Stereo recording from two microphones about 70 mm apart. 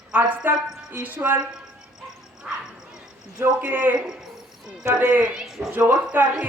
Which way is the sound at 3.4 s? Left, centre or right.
Right.